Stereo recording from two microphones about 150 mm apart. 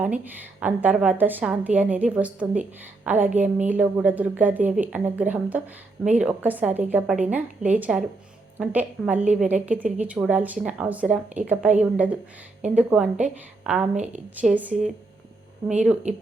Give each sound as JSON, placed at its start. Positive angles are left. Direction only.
{"t": 0.0, "sound": "a woman's voice", "side_deg": -10}
{"t": 13.9, "sound": "speech", "side_deg": -50}
{"t": 14.4, "sound": "a woman's voice", "side_deg": -10}